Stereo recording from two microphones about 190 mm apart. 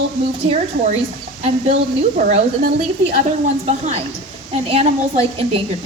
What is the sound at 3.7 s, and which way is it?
A woman's voice, 35° right (ahead or behind).